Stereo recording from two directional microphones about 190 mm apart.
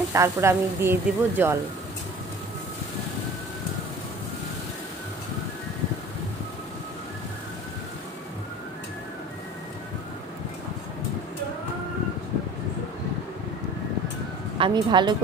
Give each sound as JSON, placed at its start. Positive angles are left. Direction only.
{"t": 0.1, "sound": "a woman's voice", "side_deg": -15}
{"t": 14.6, "sound": "a woman's voice", "side_deg": -25}